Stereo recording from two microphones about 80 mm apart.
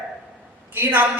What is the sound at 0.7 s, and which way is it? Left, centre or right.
Speech, right.